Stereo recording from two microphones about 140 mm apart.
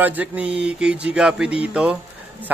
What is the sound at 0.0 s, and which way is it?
Speech, 10° right (ahead or behind).